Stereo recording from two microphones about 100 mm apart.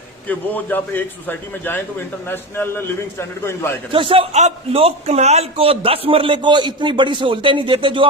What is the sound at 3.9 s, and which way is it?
A man's voice, 60° right (ahead or behind).